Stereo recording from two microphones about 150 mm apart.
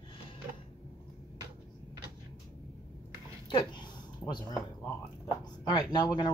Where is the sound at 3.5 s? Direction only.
30° left (ahead or behind).